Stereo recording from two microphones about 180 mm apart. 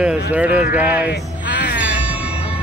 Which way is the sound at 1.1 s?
75° left (ahead or behind).